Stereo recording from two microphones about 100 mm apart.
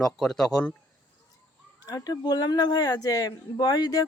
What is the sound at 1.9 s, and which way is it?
A woman's voice, 40° left (ahead or behind).